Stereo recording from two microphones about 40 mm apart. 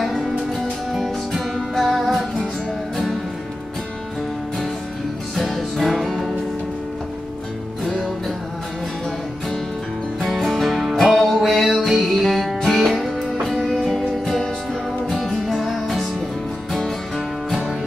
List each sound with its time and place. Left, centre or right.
0.0 s music: centre
5.3 s music: centre
10.2 s music: centre